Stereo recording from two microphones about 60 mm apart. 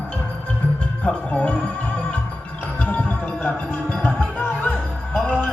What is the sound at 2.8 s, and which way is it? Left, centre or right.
Music, left.